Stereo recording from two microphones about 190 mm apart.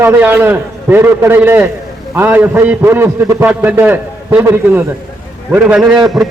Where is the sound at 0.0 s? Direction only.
10° right (ahead or behind).